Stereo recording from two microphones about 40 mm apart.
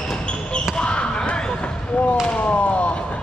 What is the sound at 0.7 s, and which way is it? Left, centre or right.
Basketball bounce, left.